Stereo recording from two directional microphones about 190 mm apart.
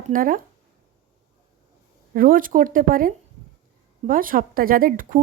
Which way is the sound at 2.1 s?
45° right (ahead or behind).